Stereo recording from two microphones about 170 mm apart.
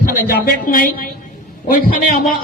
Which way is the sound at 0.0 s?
60° left (ahead or behind).